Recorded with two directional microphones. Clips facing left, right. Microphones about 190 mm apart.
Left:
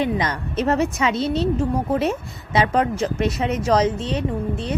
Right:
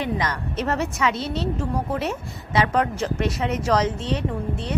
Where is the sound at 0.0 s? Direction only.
20° left (ahead or behind).